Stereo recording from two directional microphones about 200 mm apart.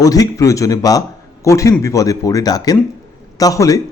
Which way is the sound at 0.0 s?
15° left (ahead or behind).